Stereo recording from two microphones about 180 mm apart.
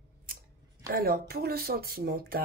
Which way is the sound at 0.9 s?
55° right (ahead or behind).